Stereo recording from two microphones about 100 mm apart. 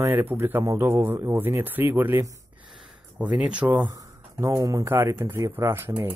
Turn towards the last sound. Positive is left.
turn(degrees=-25)  # may be behind; listen again after turning